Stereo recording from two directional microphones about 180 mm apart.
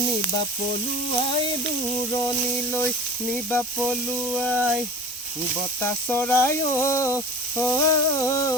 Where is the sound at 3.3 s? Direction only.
10° left (ahead or behind).